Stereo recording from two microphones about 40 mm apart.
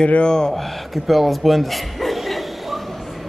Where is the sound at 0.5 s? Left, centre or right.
Centre.